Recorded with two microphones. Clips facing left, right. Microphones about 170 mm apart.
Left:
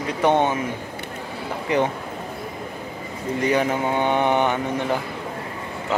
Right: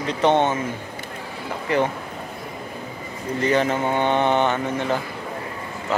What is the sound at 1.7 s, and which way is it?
Speech, 15° left (ahead or behind).